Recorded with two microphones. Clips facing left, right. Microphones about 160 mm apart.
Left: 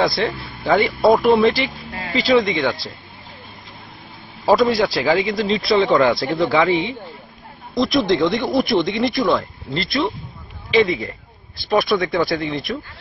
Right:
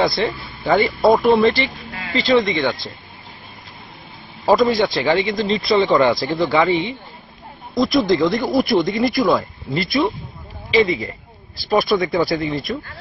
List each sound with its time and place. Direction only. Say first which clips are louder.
0.0 s speech: even; centre (ahead or behind)
1.9 s vehicle: left 2 dB; 40° left (ahead or behind)
2.1 s speech: even; centre (ahead or behind)
4.5 s speech: even; centre (ahead or behind)